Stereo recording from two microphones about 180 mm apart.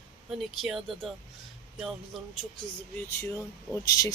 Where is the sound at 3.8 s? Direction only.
20° left (ahead or behind).